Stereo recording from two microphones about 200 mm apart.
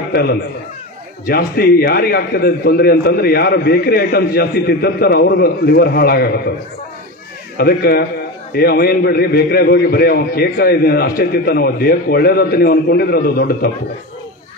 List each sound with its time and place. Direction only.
0.1 s a man's voice: 50° left (ahead or behind)
7.5 s a man's voice: 50° left (ahead or behind)